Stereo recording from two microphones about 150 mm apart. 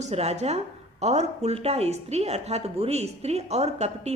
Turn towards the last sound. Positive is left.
turn(degrees=-45)  # may be behind; listen again after turning